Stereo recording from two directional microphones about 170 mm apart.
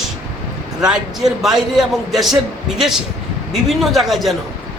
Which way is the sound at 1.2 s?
Centre (ahead or behind).